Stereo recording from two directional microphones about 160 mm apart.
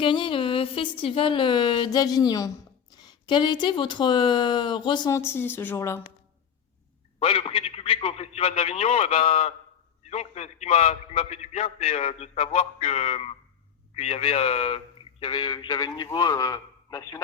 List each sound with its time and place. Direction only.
0.0 s a man's voice: 30° left (ahead or behind)
7.2 s a man's voice: 35° left (ahead or behind)